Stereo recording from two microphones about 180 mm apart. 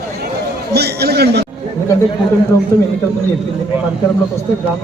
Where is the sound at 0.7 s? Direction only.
65° right (ahead or behind).